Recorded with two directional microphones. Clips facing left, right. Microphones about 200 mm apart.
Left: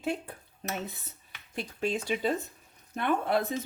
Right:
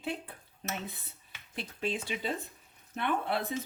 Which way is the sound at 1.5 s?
45° left (ahead or behind).